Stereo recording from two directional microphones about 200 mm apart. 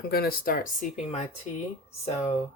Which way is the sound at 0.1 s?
50° left (ahead or behind).